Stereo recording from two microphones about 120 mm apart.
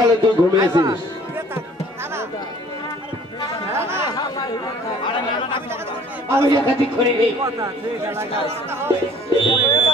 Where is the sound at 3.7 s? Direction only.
20° right (ahead or behind).